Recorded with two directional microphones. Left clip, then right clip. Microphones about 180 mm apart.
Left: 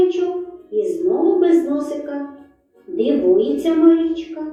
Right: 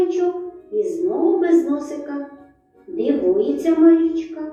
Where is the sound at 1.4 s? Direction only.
45° right (ahead or behind).